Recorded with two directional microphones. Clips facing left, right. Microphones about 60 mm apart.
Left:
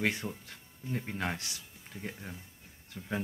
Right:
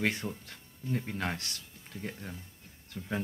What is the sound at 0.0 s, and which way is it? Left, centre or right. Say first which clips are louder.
Speech: right 1 dB; centre.